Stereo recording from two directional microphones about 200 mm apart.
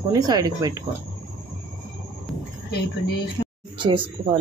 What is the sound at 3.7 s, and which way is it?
Speech, 25° right (ahead or behind).